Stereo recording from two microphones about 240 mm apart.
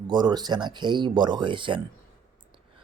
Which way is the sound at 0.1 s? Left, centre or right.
Centre.